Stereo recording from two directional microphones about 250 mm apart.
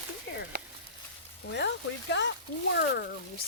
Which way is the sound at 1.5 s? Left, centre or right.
Left.